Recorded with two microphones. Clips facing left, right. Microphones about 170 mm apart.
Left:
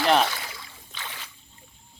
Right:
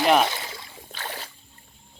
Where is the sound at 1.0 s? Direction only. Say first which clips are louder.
Right 5 dB; 45° right (ahead or behind).